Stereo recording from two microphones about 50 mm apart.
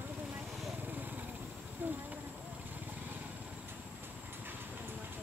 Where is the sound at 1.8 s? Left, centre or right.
Right.